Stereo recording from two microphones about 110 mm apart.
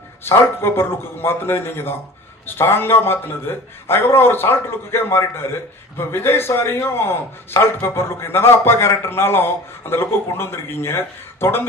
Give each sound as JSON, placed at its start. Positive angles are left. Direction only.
{"t": 0.2, "sound": "a man's voice", "side_deg": 20}